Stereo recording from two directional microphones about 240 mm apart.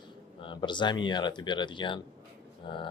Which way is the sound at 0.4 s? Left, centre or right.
Centre.